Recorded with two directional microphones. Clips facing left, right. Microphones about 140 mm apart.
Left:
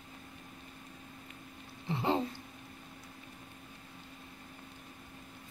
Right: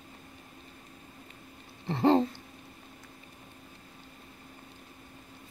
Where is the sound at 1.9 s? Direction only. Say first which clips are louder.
Right 8 dB; 55° right (ahead or behind).